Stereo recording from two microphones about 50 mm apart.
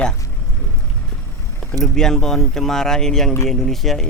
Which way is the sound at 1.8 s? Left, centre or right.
Centre.